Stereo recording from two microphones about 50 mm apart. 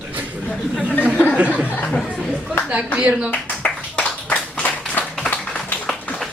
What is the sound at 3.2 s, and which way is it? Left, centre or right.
Speech, left.